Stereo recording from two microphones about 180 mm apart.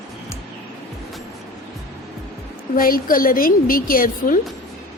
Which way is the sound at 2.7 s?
50° left (ahead or behind).